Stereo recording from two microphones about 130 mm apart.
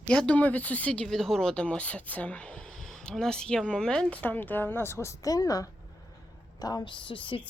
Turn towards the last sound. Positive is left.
turn(degrees=40)  # may be behind; listen again after turning